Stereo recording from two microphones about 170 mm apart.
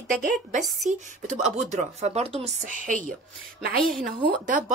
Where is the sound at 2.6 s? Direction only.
50° right (ahead or behind).